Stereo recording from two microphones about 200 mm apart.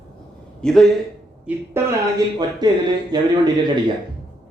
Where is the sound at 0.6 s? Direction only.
Centre (ahead or behind).